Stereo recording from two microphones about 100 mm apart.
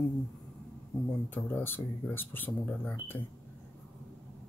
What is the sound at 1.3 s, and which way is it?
Speech, 20° left (ahead or behind).